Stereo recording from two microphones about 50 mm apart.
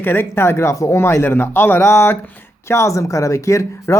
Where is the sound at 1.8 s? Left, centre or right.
Left.